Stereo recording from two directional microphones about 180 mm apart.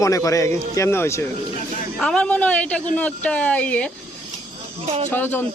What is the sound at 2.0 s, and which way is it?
Speech, 5° left (ahead or behind).